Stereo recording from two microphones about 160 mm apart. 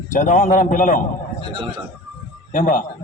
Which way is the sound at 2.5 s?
55° left (ahead or behind).